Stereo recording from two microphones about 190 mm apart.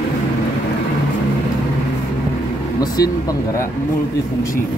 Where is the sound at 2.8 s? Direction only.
20° left (ahead or behind).